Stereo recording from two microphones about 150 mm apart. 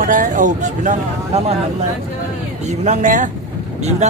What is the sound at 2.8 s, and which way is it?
Speech, 55° right (ahead or behind).